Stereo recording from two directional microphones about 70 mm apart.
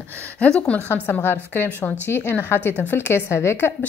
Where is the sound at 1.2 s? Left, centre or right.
Left.